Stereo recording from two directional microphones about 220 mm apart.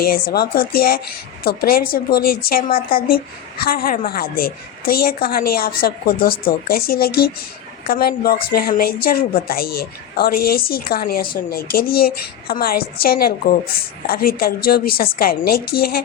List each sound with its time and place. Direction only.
0.0 s a woman's voice: 45° left (ahead or behind)